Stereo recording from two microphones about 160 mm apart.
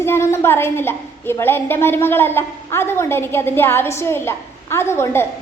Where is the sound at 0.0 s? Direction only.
15° left (ahead or behind).